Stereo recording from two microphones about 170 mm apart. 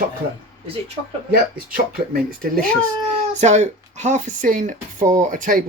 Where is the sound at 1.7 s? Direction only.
60° right (ahead or behind).